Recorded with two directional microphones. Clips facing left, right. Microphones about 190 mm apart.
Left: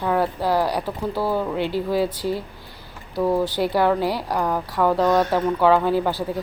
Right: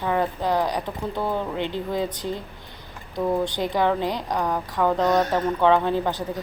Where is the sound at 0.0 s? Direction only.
5° left (ahead or behind).